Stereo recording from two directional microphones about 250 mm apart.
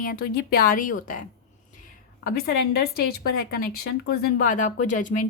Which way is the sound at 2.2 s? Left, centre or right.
Left.